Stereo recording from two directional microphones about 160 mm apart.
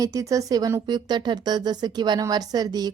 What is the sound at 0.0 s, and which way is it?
A woman's voice, 20° right (ahead or behind).